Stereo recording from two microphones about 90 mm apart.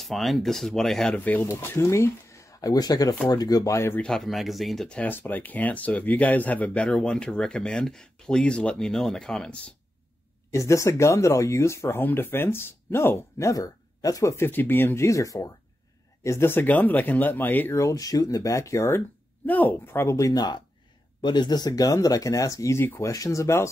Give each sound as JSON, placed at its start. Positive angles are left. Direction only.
{"t": 0.0, "sound": "speech", "side_deg": 0}
{"t": 1.1, "sound": "speech", "side_deg": 20}
{"t": 1.5, "sound": "speech", "side_deg": 30}
{"t": 4.0, "sound": "speech", "side_deg": 5}
{"t": 4.8, "sound": "speech", "side_deg": 15}
{"t": 10.5, "sound": "speech", "side_deg": 35}
{"t": 16.3, "sound": "speech", "side_deg": 25}
{"t": 19.4, "sound": "speech", "side_deg": 20}
{"t": 20.2, "sound": "speech", "side_deg": 45}